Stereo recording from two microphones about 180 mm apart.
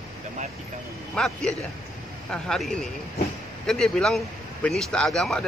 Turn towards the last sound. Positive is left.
turn(degrees=0)  # may be behind; listen again after turning